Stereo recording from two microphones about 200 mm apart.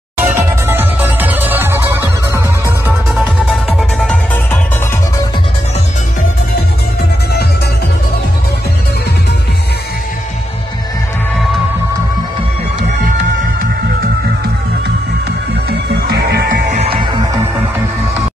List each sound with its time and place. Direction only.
0.2 s music: 10° right (ahead or behind)
3.4 s music: centre (ahead or behind)
16.1 s music: 55° right (ahead or behind)
16.7 s music: 30° right (ahead or behind)